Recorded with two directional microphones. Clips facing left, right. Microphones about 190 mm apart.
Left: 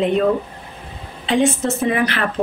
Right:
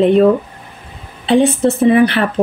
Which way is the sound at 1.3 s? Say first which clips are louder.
Right 6 dB; 35° right (ahead or behind).